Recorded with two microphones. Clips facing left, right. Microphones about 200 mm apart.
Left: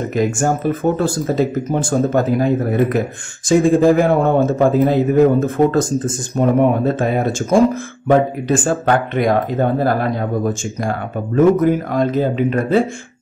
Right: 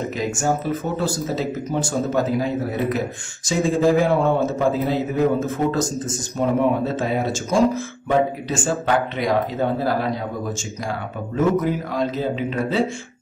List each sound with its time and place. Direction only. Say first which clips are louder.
0.1 s speech: left 8 dB; 50° left (ahead or behind)